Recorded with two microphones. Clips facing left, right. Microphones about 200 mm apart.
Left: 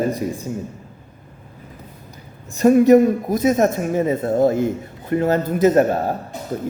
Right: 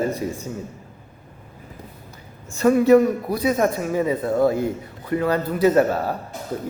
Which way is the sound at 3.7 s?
45° left (ahead or behind).